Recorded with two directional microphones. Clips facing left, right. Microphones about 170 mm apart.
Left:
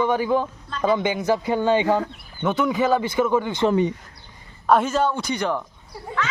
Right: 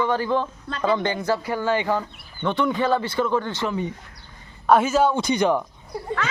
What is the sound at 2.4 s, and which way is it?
A man's voice, 5° left (ahead or behind).